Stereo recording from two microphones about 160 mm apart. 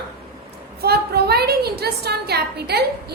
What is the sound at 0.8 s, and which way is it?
A woman's voice, 80° right.